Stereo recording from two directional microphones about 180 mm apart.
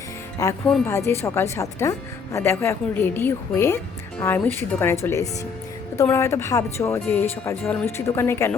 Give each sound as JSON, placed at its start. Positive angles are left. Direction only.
{"t": 0.4, "sound": "speech", "side_deg": 15}